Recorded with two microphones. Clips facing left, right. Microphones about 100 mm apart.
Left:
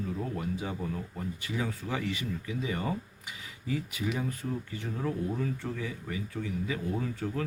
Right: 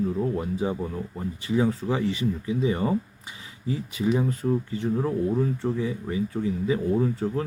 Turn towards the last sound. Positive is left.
turn(degrees=-30)  # may be behind; listen again after turning